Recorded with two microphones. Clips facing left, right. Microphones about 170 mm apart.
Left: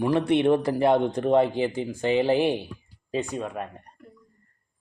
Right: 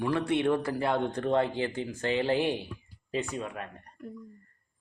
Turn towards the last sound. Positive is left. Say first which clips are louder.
# left 4 dB
turn(degrees=35)  # may be behind; listen again after turning